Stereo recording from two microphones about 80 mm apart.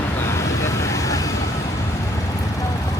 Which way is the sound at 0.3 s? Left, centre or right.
Left.